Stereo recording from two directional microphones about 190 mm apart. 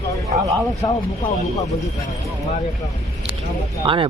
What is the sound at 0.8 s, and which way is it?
Speech, 20° left (ahead or behind).